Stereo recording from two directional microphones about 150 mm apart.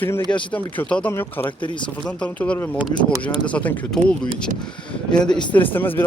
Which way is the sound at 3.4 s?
10° left (ahead or behind).